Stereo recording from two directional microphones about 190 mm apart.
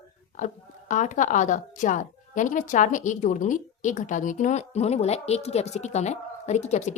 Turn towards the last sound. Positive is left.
turn(degrees=35)  # may be behind; listen again after turning